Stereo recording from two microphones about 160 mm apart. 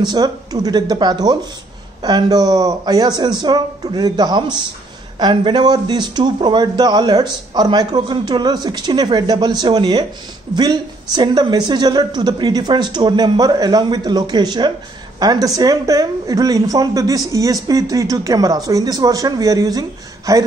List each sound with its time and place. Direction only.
0.0 s speech: 25° right (ahead or behind)